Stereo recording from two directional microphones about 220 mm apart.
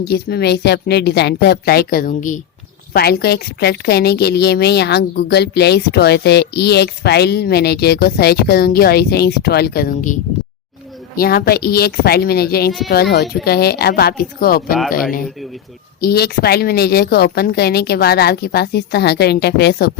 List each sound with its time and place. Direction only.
0.0 s a woman's voice: 45° left (ahead or behind)
11.2 s a woman's voice: 45° left (ahead or behind)
16.0 s a woman's voice: 45° left (ahead or behind)